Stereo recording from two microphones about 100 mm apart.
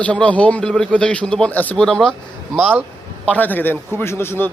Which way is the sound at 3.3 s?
20° left (ahead or behind).